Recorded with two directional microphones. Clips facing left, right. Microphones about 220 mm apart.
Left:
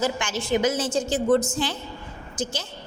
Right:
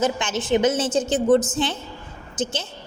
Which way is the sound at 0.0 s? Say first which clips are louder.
Right 3 dB; 20° right (ahead or behind).